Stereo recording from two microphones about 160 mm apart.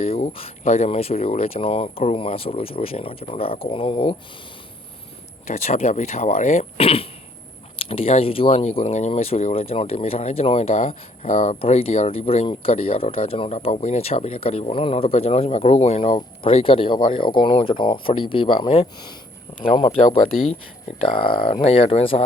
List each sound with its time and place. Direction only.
0.0 s speech: 40° left (ahead or behind)
5.5 s speech: 40° left (ahead or behind)
21.0 s speech: 35° left (ahead or behind)